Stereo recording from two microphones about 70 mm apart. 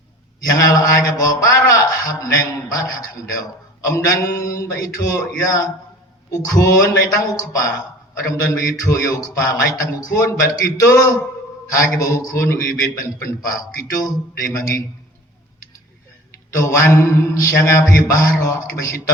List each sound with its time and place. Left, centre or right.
0.5 s a man's voice: left
16.6 s a man's voice: left